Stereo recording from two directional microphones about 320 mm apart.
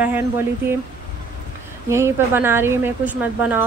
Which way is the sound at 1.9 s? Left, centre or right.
Centre.